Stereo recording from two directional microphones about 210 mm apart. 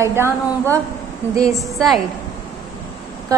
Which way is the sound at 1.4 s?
15° right (ahead or behind).